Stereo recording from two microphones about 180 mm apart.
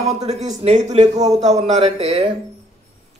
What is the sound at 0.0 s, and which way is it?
Speech, 40° right (ahead or behind).